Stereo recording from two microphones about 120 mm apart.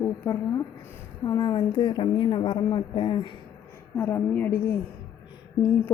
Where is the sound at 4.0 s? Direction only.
20° left (ahead or behind).